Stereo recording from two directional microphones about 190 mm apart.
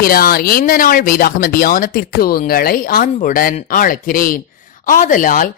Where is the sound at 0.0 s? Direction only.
50° left (ahead or behind).